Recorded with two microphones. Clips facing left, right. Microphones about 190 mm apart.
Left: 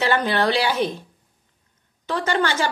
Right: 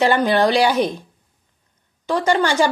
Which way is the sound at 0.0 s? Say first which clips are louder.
Right 5 dB; 15° right (ahead or behind).